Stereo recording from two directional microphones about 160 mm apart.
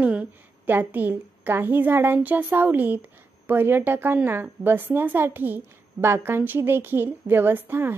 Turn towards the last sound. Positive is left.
turn(degrees=-15)  # may be behind; listen again after turning